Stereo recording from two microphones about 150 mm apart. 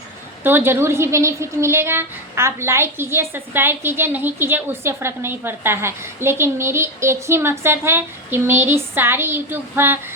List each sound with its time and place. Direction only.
0.4 s a woman's voice: 15° right (ahead or behind)